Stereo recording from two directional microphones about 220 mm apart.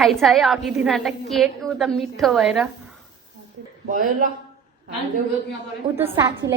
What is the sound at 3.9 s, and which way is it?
Speech, 40° right (ahead or behind).